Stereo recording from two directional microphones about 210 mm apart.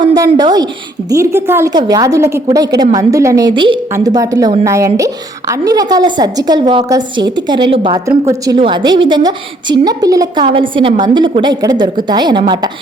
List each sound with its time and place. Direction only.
0.0 s a woman's voice: 20° right (ahead or behind)